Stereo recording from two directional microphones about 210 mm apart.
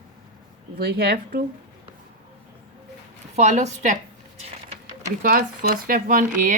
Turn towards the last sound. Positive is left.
turn(degrees=-40)  # may be behind; listen again after turning